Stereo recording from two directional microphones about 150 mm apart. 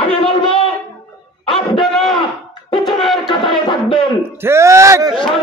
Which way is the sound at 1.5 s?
35° left (ahead or behind).